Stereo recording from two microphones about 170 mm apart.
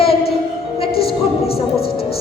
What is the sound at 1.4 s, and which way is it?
Speech, 65° left (ahead or behind).